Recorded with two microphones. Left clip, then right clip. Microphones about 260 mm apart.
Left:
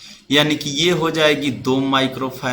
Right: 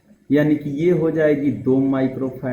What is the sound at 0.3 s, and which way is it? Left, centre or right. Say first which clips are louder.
A man's voice: left 2 dB; left.